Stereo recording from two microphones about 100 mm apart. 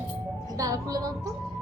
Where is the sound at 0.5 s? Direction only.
35° right (ahead or behind).